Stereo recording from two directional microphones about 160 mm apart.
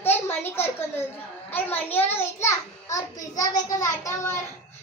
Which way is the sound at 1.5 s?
10° left (ahead or behind).